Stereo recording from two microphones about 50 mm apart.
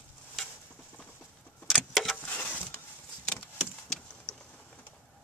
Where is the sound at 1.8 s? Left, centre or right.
Centre.